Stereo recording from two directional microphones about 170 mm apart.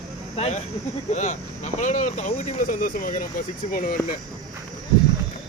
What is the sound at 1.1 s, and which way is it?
Speech, 45° left (ahead or behind).